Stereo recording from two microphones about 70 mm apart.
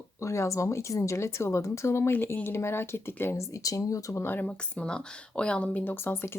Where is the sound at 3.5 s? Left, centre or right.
Left.